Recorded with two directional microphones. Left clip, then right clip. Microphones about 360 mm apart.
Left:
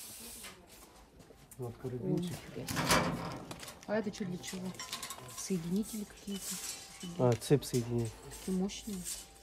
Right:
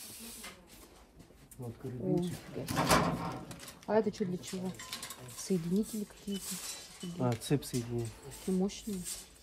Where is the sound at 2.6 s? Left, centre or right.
Centre.